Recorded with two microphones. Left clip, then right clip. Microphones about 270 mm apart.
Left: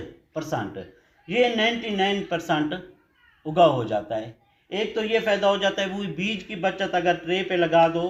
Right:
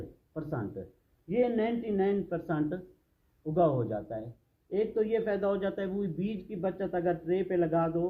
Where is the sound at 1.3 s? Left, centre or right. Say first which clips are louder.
Left 8 dB; centre.